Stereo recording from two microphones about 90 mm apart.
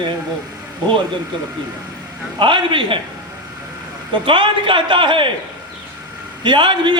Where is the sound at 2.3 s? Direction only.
65° right (ahead or behind).